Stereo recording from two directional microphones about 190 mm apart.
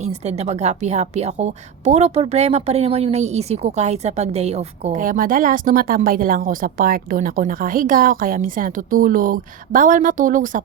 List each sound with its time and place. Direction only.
0.0 s a woman's voice: 35° right (ahead or behind)